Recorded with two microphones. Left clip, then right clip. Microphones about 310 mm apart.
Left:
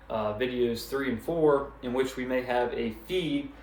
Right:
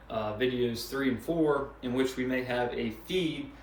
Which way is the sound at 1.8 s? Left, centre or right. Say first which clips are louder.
Left 1 dB; centre.